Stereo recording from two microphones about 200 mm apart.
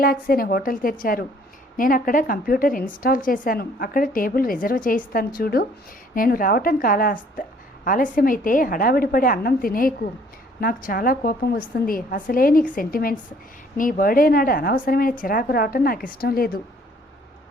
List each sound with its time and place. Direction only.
0.0 s a woman's voice: 45° left (ahead or behind)